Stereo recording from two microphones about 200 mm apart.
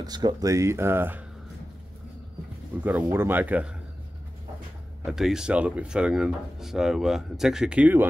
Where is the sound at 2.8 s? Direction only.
10° right (ahead or behind).